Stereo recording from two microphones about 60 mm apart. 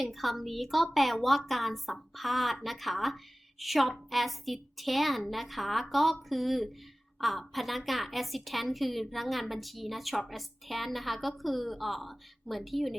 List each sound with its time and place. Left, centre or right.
0.0 s a woman's voice: centre